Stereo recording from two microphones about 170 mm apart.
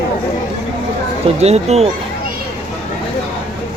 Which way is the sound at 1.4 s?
40° right (ahead or behind).